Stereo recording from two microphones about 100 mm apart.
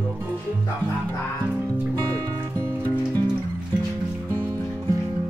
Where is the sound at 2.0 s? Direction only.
35° right (ahead or behind).